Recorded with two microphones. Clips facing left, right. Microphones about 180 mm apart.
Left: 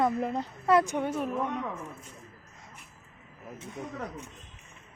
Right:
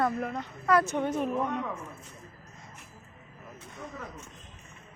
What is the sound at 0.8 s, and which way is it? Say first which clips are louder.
Speech: right 1 dB; 10° left (ahead or behind).